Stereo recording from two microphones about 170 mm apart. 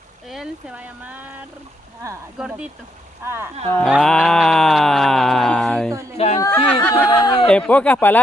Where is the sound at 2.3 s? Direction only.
5° right (ahead or behind).